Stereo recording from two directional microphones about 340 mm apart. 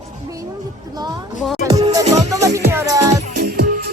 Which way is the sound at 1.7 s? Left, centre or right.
Centre.